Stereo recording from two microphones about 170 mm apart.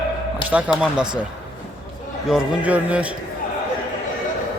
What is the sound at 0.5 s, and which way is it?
Speech, 5° right (ahead or behind).